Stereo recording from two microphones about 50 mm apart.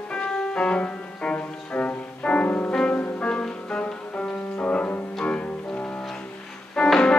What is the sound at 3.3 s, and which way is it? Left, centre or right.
Music, centre.